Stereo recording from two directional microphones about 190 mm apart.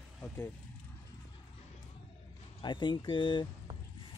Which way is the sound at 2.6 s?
25° left (ahead or behind).